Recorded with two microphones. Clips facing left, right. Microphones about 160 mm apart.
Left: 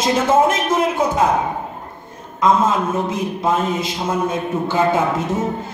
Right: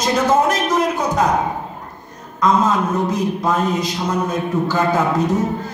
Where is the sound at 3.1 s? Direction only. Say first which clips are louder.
Right 1 dB; 25° left (ahead or behind).